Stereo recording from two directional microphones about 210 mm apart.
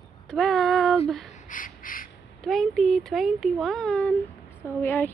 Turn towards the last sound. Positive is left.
turn(degrees=10)  # may be behind; listen again after turning